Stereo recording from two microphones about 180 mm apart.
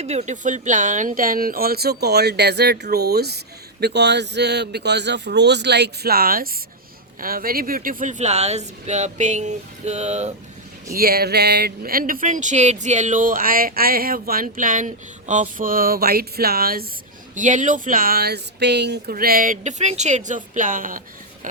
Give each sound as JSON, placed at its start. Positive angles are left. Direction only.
{"t": 0.0, "sound": "speech", "side_deg": -35}
{"t": 10.9, "sound": "speech", "side_deg": -60}
{"t": 17.3, "sound": "speech", "side_deg": -45}